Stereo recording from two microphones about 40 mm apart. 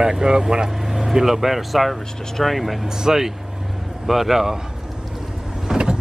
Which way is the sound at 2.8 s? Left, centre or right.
Centre.